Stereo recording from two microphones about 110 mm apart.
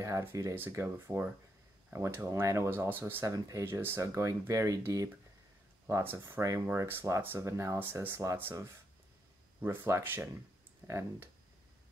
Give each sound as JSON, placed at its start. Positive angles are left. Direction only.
{"t": 0.0, "sound": "speech", "side_deg": -25}
{"t": 3.3, "sound": "speech", "side_deg": -35}
{"t": 3.6, "sound": "speech", "side_deg": -20}